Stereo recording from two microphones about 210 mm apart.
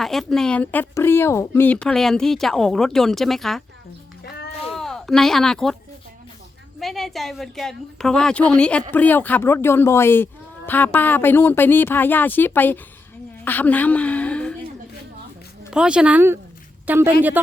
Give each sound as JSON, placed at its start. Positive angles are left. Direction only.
{"t": 0.0, "sound": "speech", "side_deg": 0}
{"t": 4.2, "sound": "a sound", "side_deg": 50}
{"t": 4.7, "sound": "speech", "side_deg": 0}
{"t": 6.7, "sound": "a woman's voice", "side_deg": 0}
{"t": 15.7, "sound": "a woman's voice", "side_deg": -5}